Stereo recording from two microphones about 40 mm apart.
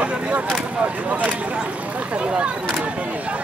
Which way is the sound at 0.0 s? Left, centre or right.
Right.